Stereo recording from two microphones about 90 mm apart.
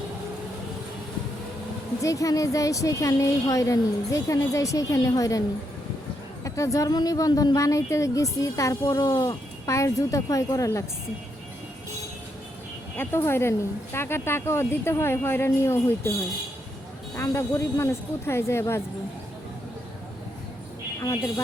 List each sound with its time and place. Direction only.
2.0 s a woman's voice: 40° left (ahead or behind)
6.4 s a woman's voice: 35° left (ahead or behind)
13.0 s speech: 30° left (ahead or behind)
17.2 s speech: 30° left (ahead or behind)
21.0 s a woman's voice: 40° left (ahead or behind)